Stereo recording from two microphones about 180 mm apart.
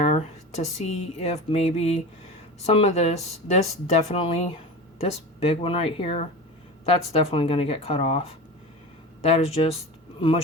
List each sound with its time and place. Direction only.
0.0 s speech: 35° left (ahead or behind)